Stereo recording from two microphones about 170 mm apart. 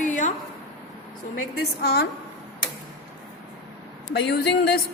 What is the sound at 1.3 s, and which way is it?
Speech, 70° left (ahead or behind).